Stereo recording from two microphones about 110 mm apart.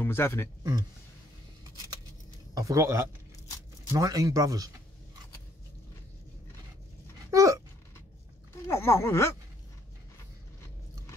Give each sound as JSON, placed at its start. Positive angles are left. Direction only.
{"t": 0.0, "sound": "speech", "side_deg": 20}
{"t": 2.5, "sound": "speech", "side_deg": -30}
{"t": 7.2, "sound": "a sound", "side_deg": -30}
{"t": 8.6, "sound": "speech", "side_deg": 25}